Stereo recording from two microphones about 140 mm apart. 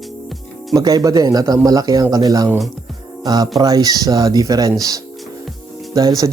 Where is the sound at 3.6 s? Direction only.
25° right (ahead or behind).